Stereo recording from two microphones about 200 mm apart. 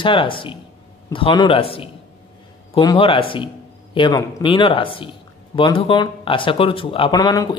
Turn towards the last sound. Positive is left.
turn(degrees=15)  # may be behind; listen again after turning